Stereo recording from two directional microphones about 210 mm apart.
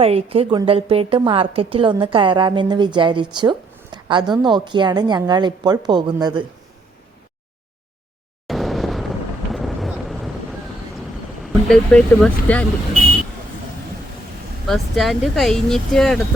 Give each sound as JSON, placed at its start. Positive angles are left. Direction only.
{"t": 0.0, "sound": "a woman's voice", "side_deg": -25}
{"t": 8.4, "sound": "vehicle", "side_deg": 0}
{"t": 11.7, "sound": "speech", "side_deg": 5}
{"t": 14.7, "sound": "speech", "side_deg": 0}